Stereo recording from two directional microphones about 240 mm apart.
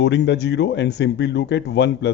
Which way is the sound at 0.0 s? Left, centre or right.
Left.